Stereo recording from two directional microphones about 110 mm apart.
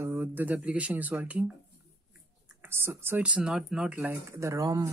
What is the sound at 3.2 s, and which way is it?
Speech, 10° right (ahead or behind).